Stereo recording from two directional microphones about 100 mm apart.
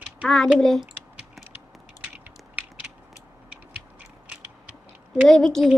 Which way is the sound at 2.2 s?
15° right (ahead or behind).